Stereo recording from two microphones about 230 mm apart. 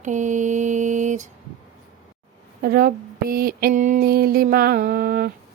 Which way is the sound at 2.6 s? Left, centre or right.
Right.